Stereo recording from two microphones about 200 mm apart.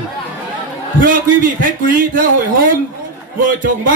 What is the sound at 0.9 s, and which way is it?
A man's voice, 45° right (ahead or behind).